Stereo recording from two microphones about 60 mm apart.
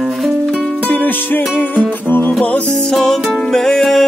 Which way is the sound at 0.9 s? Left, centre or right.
Left.